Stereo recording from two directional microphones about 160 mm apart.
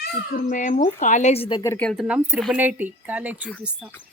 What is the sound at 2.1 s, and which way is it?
Speech, 10° right (ahead or behind).